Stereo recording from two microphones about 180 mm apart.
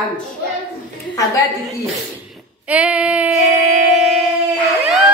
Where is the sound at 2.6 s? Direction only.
5° right (ahead or behind).